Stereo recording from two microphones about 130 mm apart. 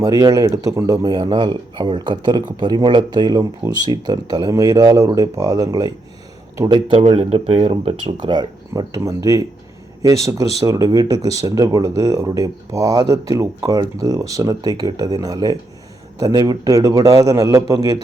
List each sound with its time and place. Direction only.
0.0 s speech: 30° right (ahead or behind)
7.0 s speech: 50° right (ahead or behind)
8.0 s speech: 35° right (ahead or behind)